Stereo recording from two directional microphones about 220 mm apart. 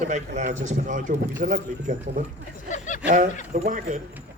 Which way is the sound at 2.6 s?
35° left (ahead or behind).